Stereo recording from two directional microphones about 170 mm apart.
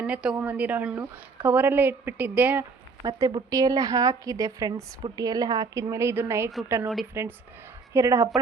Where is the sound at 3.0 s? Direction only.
25° right (ahead or behind).